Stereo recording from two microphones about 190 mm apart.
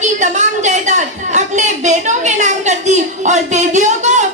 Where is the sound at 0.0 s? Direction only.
40° right (ahead or behind).